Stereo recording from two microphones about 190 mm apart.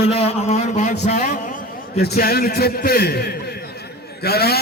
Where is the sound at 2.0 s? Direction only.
55° left (ahead or behind).